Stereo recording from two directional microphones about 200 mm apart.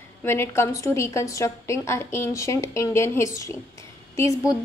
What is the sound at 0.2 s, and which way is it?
A woman's voice, 10° left (ahead or behind).